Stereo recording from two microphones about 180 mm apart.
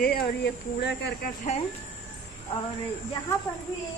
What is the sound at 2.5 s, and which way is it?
Speech, 30° left (ahead or behind).